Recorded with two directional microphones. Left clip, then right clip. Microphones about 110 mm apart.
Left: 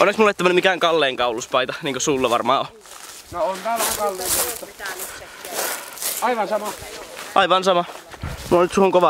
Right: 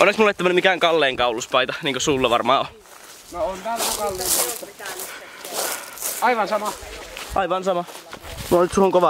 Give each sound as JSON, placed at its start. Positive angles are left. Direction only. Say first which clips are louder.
{"t": 0.0, "sound": "speech", "louder": "even", "side_deg": 5}
{"t": 0.3, "sound": "speech", "louder": "left 1 dB", "side_deg": 15}
{"t": 0.7, "sound": "speech", "louder": "even", "side_deg": 5}
{"t": 3.3, "sound": "speech", "louder": "left 3 dB", "side_deg": 50}
{"t": 4.2, "sound": "speech", "louder": "even", "side_deg": 5}
{"t": 5.5, "sound": "a sound", "louder": "left 1 dB", "side_deg": 10}
{"t": 6.2, "sound": "speech", "louder": "right 2 dB", "side_deg": -35}
{"t": 7.3, "sound": "speech", "louder": "left 5 dB", "side_deg": 60}
{"t": 8.6, "sound": "speech", "louder": "left 1 dB", "side_deg": 5}